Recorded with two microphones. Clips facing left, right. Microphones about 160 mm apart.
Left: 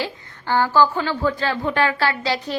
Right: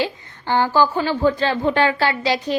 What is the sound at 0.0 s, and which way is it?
A woman's voice, 20° right (ahead or behind).